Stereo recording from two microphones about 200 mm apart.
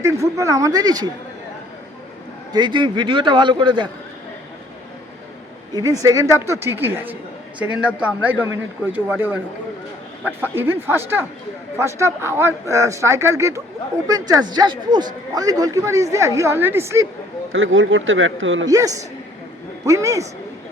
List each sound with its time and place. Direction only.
0.0 s speech: 15° right (ahead or behind)
2.5 s a man's voice: 20° right (ahead or behind)
5.7 s speech: 15° right (ahead or behind)
10.4 s speech: 10° right (ahead or behind)
17.5 s speech: 75° right (ahead or behind)
18.7 s speech: 15° right (ahead or behind)